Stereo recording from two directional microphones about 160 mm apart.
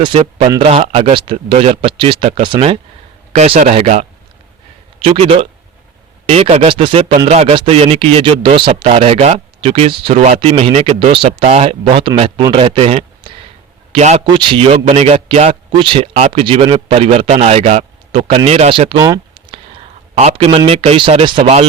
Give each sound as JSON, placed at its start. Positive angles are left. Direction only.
{"t": 0.0, "sound": "speech", "side_deg": -35}
{"t": 0.8, "sound": "a man's voice", "side_deg": -40}
{"t": 14.3, "sound": "speech", "side_deg": -30}
{"t": 19.0, "sound": "a sound", "side_deg": -20}
{"t": 20.1, "sound": "speech", "side_deg": -40}